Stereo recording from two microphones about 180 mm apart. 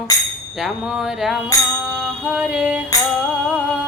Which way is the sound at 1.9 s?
Centre (ahead or behind).